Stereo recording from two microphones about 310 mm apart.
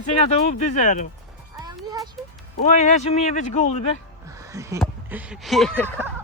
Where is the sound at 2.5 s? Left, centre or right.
Left.